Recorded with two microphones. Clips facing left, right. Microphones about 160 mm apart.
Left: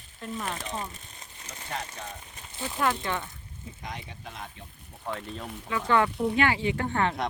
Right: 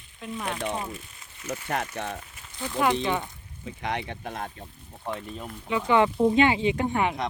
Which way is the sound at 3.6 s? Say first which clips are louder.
Right 9 dB; 70° right (ahead or behind).